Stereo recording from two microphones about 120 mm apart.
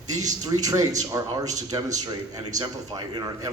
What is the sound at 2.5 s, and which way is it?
Speech, 30° right (ahead or behind).